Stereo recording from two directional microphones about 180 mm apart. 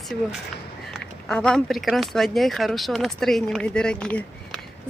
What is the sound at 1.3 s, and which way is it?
Speech, 5° left (ahead or behind).